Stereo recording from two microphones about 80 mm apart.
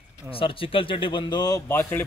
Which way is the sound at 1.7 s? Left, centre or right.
Left.